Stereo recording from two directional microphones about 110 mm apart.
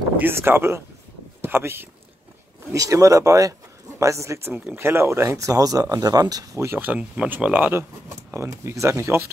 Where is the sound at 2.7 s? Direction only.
30° right (ahead or behind).